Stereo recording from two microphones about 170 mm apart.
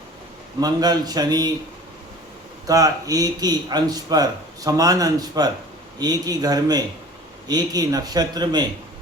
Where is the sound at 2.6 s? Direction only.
20° right (ahead or behind).